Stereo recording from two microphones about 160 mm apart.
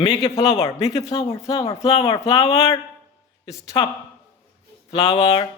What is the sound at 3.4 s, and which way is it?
Speech, 25° left (ahead or behind).